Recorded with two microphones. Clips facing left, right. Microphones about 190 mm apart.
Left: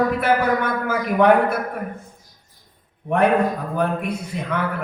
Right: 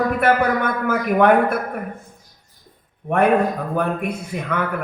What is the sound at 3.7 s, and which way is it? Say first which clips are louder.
Speech: even; 55° right (ahead or behind).